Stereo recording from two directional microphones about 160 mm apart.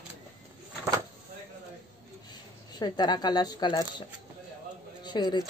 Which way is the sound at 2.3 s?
25° left (ahead or behind).